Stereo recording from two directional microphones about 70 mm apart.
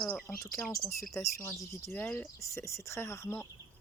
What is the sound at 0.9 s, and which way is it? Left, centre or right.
Speech, left.